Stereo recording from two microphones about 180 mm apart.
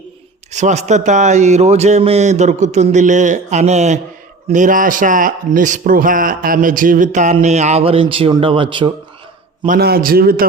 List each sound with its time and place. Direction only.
0.5 s a man's voice: 40° right (ahead or behind)
9.6 s a man's voice: 60° right (ahead or behind)